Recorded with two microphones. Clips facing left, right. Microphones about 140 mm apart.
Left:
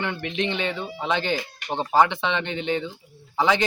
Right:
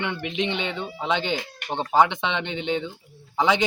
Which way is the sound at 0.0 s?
15° right (ahead or behind).